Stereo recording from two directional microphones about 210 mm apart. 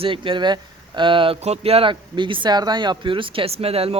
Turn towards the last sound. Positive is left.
turn(degrees=-30)  # may be behind; listen again after turning